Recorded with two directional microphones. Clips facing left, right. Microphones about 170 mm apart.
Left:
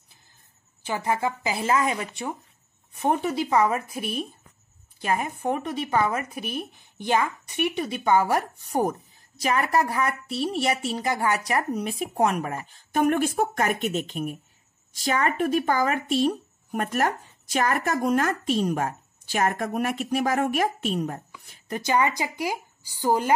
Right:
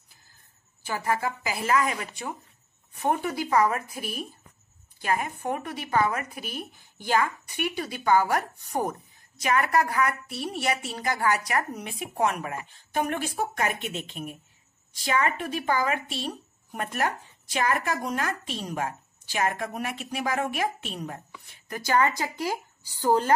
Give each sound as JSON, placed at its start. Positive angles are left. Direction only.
{"t": 0.8, "sound": "speech", "side_deg": 20}
{"t": 21.6, "sound": "speech", "side_deg": 25}
{"t": 21.9, "sound": "a woman's voice", "side_deg": 15}